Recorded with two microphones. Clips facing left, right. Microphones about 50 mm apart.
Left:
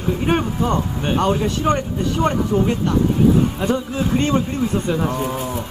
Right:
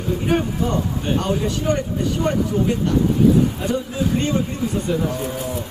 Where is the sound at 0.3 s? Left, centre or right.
Left.